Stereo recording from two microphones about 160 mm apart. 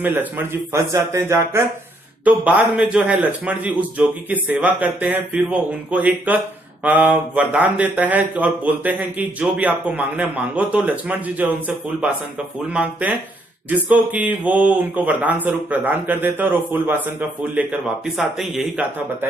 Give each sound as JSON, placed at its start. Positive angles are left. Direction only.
{"t": 0.0, "sound": "a man's voice", "side_deg": -10}